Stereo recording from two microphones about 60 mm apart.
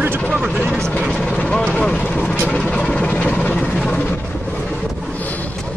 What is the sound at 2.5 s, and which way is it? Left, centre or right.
Vehicle, centre.